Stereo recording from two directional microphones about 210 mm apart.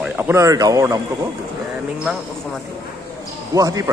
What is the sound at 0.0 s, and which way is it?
Speech, 10° right (ahead or behind).